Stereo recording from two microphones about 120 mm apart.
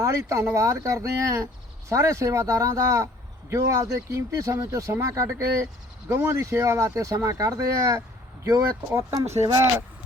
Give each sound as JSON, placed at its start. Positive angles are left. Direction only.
{"t": 0.0, "sound": "speech", "side_deg": -25}